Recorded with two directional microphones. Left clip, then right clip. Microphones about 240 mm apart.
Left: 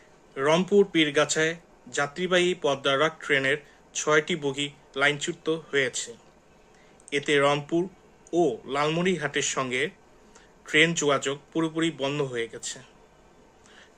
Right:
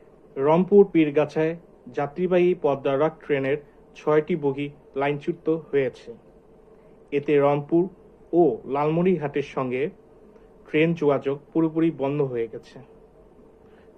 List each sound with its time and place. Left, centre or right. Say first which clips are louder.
0.3 s speech: right 4 dB; centre
7.1 s speech: right 2 dB; centre